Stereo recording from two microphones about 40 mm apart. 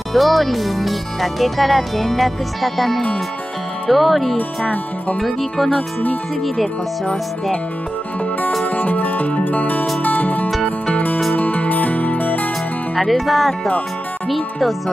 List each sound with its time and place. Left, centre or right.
0.1 s speech: centre
5.7 s speech: left
8.6 s music: left
13.0 s speech: centre